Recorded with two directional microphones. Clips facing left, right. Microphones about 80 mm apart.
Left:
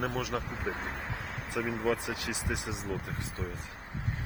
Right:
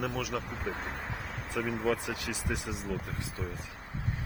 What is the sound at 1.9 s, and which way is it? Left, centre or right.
Speech, centre.